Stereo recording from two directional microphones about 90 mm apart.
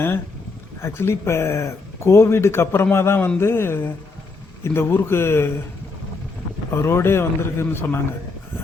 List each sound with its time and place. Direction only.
0.8 s speech: 30° left (ahead or behind)
6.7 s speech: 30° left (ahead or behind)